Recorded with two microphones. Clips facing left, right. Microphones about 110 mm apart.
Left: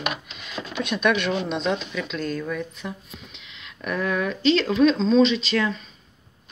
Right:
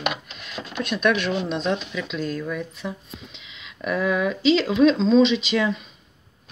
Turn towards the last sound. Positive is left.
turn(degrees=-10)  # may be behind; listen again after turning